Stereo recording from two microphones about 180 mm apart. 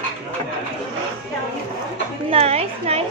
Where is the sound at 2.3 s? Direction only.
35° right (ahead or behind).